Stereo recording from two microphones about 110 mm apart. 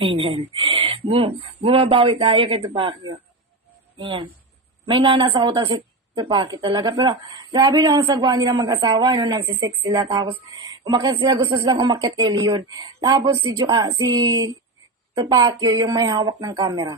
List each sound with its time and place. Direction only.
0.0 s speech: 55° right (ahead or behind)